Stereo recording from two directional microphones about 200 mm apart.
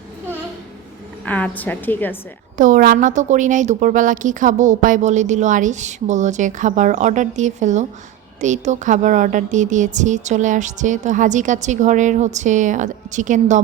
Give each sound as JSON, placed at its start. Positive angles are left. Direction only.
{"t": 1.2, "sound": "a woman's voice", "side_deg": 10}
{"t": 2.6, "sound": "speech", "side_deg": -40}